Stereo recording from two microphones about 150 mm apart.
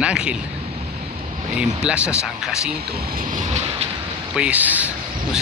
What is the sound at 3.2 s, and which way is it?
Vehicle, 60° right (ahead or behind).